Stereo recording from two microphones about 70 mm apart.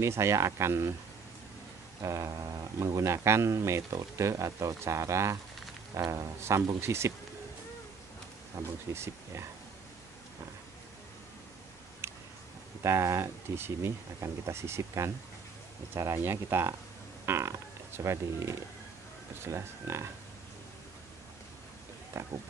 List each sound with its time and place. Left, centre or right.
0.0 s speech: right
2.0 s speech: right
6.8 s speech: right
8.6 s speech: right
12.0 s a sound: right
12.8 s speech: right
16.2 s speech: right
22.2 s speech: right